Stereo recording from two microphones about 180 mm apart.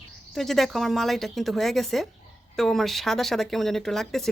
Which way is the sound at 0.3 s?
Centre (ahead or behind).